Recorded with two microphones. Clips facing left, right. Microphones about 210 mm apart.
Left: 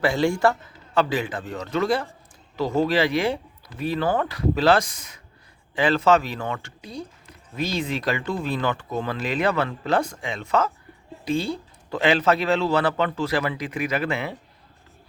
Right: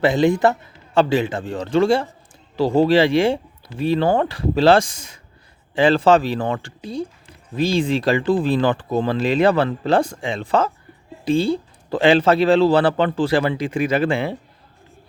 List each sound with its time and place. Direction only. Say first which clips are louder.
0.0 s speech: right 5 dB; 20° right (ahead or behind)